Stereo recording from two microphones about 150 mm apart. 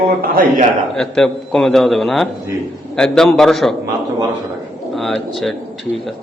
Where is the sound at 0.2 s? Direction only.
70° right (ahead or behind).